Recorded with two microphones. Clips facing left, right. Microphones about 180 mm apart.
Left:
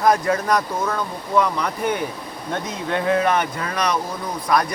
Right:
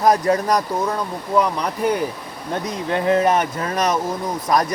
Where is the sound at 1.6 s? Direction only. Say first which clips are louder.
Right 2 dB; 40° right (ahead or behind).